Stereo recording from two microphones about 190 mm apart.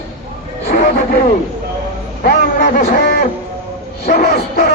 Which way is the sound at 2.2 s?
55° left (ahead or behind).